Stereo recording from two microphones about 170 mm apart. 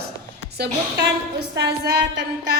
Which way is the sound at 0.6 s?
75° right (ahead or behind).